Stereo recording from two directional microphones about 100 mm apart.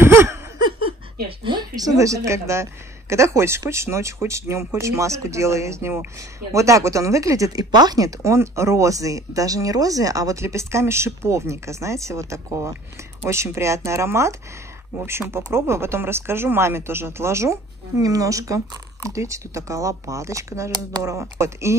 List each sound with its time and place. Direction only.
0.0 s a sound: 25° right (ahead or behind)
0.6 s laughter: 55° right (ahead or behind)
1.4 s a woman's voice: 45° right (ahead or behind); by 21.7 s 30° right (ahead or behind)